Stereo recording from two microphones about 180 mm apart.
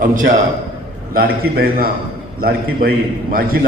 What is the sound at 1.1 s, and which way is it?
A man's voice, 55° right (ahead or behind).